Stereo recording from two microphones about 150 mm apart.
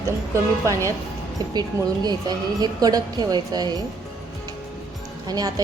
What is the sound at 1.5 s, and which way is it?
A woman's voice, 25° right (ahead or behind).